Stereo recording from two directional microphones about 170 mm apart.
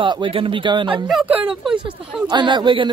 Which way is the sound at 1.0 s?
5° right (ahead or behind).